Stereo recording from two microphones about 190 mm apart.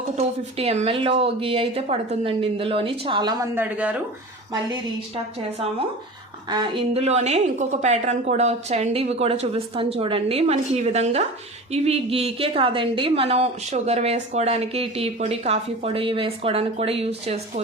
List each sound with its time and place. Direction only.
0.2 s a woman's voice: 35° right (ahead or behind)
3.5 s speech: 10° right (ahead or behind)
6.5 s a woman's voice: 25° right (ahead or behind)